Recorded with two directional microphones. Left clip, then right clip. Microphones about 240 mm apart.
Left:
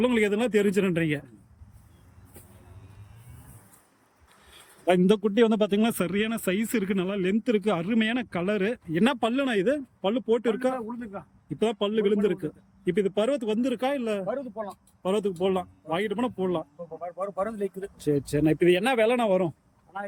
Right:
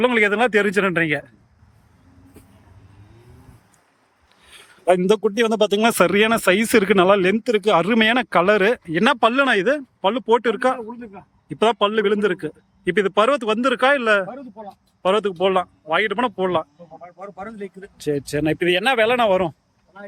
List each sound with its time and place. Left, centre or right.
0.0 s speech: centre
4.9 s speech: centre
16.3 s speech: right
17.0 s speech: left
17.9 s speech: centre